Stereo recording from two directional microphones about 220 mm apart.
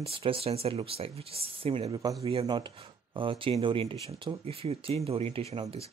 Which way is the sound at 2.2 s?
25° right (ahead or behind).